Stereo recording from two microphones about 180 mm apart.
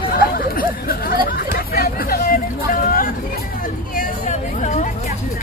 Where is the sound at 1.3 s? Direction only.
60° left (ahead or behind); by 4.9 s 45° left (ahead or behind).